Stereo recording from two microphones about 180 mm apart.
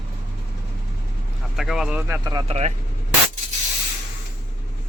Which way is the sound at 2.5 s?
35° right (ahead or behind).